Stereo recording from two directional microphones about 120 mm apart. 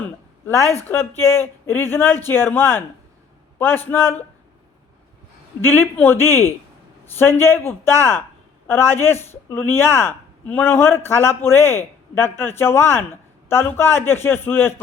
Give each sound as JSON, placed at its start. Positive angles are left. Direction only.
{"t": 0.8, "sound": "a man's voice", "side_deg": 20}
{"t": 5.6, "sound": "speech", "side_deg": 20}